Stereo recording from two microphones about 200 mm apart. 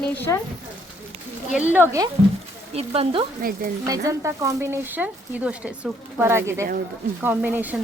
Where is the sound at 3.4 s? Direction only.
45° right (ahead or behind).